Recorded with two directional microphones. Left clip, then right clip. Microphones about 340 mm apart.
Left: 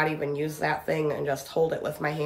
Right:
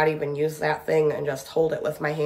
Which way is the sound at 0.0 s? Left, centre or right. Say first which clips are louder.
Right 4 dB; centre.